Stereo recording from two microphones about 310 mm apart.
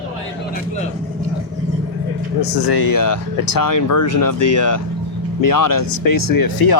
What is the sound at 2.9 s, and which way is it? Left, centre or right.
Speech, left.